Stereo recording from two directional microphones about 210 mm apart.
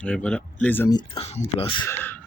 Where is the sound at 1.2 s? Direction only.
25° left (ahead or behind).